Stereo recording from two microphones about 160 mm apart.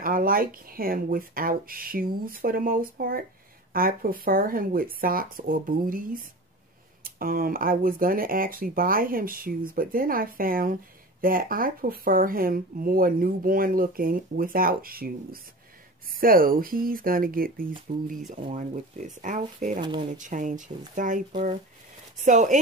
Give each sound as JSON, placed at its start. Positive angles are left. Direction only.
{"t": 0.0, "sound": "speech", "side_deg": -65}
{"t": 18.3, "sound": "speech", "side_deg": -50}
{"t": 19.8, "sound": "speech", "side_deg": -30}
{"t": 20.2, "sound": "speech", "side_deg": -50}